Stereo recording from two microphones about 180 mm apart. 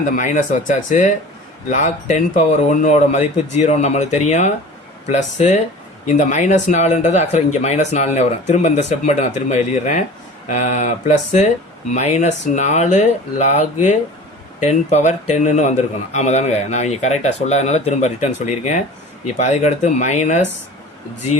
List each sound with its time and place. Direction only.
0.0 s speech: 45° left (ahead or behind)